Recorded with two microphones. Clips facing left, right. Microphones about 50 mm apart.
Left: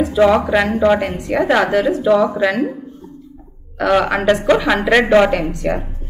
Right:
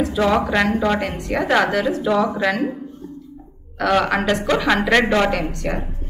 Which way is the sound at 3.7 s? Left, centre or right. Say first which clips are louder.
Left 3 dB; centre.